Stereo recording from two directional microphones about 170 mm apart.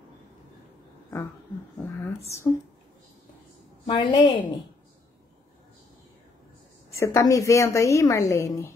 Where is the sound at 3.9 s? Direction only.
25° left (ahead or behind).